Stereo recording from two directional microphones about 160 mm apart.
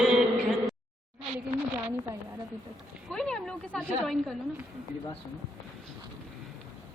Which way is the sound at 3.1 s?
5° left (ahead or behind).